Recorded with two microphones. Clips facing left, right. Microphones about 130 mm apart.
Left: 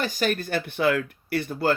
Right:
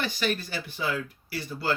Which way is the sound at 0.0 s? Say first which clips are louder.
Left 4 dB; 45° left (ahead or behind).